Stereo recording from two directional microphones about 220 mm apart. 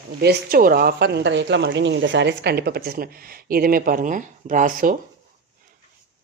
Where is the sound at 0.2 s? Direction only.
45° right (ahead or behind).